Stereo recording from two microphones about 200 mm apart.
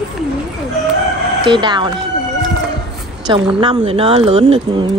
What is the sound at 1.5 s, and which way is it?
Speech, 25° right (ahead or behind).